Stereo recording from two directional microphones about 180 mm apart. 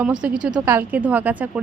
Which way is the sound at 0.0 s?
5° right (ahead or behind).